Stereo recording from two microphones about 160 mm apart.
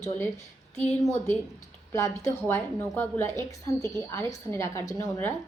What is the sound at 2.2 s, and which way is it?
A woman's voice, 15° left (ahead or behind).